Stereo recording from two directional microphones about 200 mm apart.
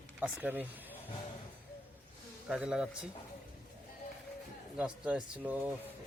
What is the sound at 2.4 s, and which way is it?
Speech, 5° right (ahead or behind).